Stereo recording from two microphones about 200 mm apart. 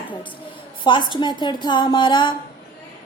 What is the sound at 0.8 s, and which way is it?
A woman's voice, 25° left (ahead or behind).